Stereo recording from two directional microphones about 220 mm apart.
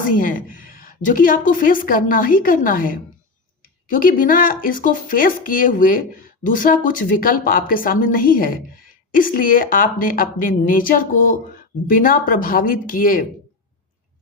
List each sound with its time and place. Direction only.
0.2 s speech: 40° left (ahead or behind)